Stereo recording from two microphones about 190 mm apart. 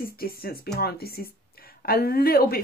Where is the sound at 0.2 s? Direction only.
50° left (ahead or behind).